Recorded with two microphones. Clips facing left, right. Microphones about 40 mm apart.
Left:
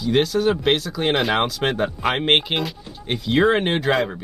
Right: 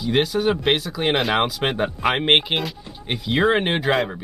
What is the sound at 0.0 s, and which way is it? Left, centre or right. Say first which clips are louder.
Speech: left 1 dB; centre.